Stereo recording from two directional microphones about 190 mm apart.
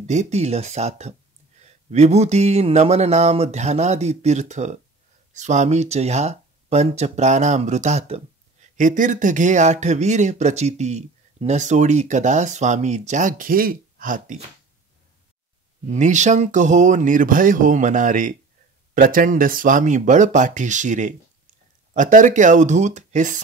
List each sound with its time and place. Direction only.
0.0 s speech: 35° right (ahead or behind)
15.9 s speech: 40° right (ahead or behind)